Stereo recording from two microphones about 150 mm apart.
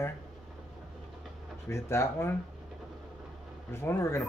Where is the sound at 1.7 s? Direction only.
15° left (ahead or behind).